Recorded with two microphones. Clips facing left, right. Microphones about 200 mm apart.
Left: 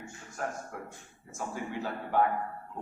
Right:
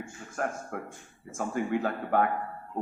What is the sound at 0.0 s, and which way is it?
A man's voice, 55° right (ahead or behind).